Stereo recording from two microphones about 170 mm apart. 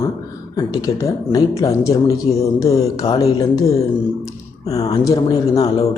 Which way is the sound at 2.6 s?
20° left (ahead or behind).